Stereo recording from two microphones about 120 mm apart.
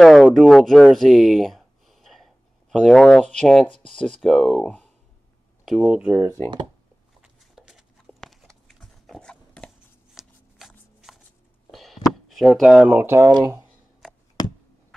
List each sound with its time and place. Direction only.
0.0 s speech: centre (ahead or behind)
5.9 s speech: 15° right (ahead or behind)
7.2 s a sound: 5° right (ahead or behind)
10.2 s shuffling cards: 5° right (ahead or behind)
11.7 s a sound: centre (ahead or behind)
12.9 s speech: 20° right (ahead or behind)
13.3 s speech: 35° right (ahead or behind)